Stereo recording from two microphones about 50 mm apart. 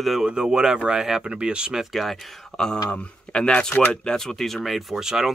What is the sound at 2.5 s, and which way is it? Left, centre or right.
Speech, centre.